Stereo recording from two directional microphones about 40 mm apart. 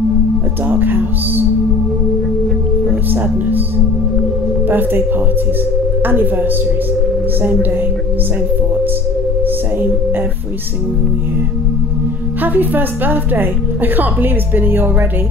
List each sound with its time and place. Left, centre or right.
0.7 s a woman's voice: right
2.9 s music: right
4.6 s a woman's voice: right
6.0 s a woman's voice: right
12.4 s a woman's voice: right